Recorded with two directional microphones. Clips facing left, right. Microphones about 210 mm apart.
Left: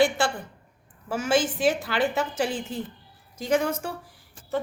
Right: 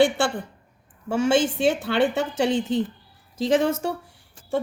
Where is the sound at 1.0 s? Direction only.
25° right (ahead or behind).